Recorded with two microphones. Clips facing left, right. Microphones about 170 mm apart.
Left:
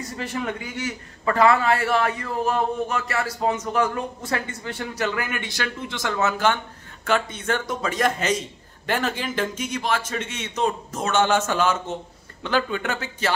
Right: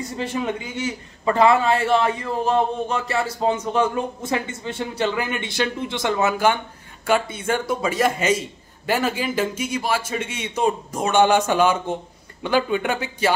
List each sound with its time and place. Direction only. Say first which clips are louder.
0.2 s a man's voice: right 3 dB; 20° right (ahead or behind)
6.2 s a man's voice: right 1 dB; 10° right (ahead or behind)